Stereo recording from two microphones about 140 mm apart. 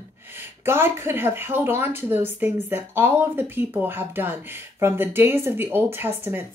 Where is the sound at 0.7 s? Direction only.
15° right (ahead or behind).